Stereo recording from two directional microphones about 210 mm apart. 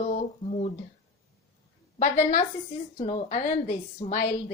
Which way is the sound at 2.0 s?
35° left (ahead or behind).